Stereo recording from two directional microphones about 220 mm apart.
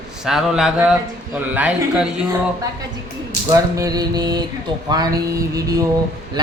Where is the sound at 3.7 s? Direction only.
15° right (ahead or behind).